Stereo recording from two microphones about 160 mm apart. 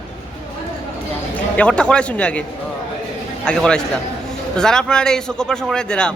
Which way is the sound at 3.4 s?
5° left (ahead or behind).